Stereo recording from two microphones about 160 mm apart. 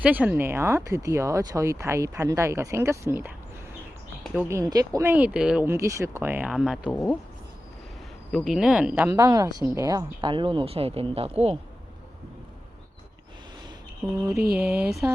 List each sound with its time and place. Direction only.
0.0 s speech: 10° right (ahead or behind)
4.4 s speech: 20° right (ahead or behind)
8.3 s speech: centre (ahead or behind)
9.0 s speech: 25° right (ahead or behind); by 11.5 s 40° right (ahead or behind)
14.5 s speech: 5° right (ahead or behind)